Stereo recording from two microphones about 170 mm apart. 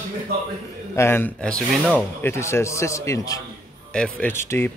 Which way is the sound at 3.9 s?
5° left (ahead or behind).